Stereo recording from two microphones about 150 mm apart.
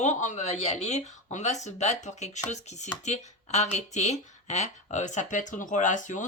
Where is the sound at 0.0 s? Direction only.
55° left (ahead or behind).